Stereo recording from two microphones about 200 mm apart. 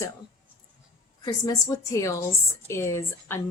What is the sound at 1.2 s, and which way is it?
A woman's voice, 20° left (ahead or behind).